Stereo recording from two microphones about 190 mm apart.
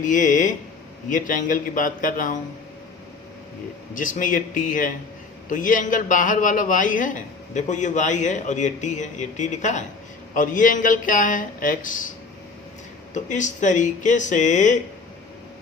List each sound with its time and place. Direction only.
0.0 s speech: 40° left (ahead or behind)
3.9 s a man's voice: 45° left (ahead or behind)
13.1 s a man's voice: 40° left (ahead or behind)